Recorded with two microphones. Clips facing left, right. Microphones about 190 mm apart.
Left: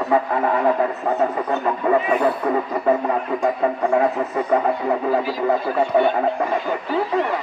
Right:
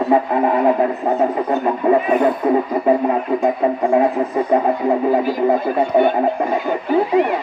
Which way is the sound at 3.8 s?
20° right (ahead or behind).